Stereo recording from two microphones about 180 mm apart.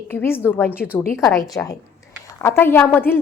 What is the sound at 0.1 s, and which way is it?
A woman's voice, 15° left (ahead or behind).